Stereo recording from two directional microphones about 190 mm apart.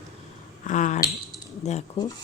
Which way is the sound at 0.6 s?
40° left (ahead or behind).